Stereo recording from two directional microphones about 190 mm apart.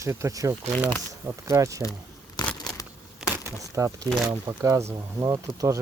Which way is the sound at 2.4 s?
20° left (ahead or behind).